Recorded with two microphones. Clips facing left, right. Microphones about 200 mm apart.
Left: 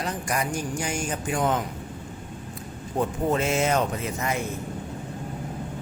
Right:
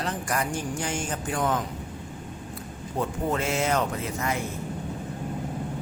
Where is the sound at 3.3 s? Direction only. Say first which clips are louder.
Left 2 dB; 20° left (ahead or behind).